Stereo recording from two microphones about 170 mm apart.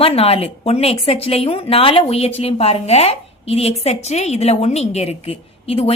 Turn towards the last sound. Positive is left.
turn(degrees=35)  # may be behind; listen again after turning